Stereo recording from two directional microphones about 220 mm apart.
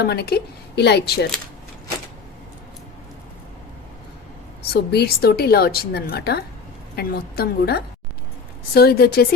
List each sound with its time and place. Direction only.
0.0 s a woman's voice: 45° left (ahead or behind)
4.7 s a woman's voice: 45° left (ahead or behind)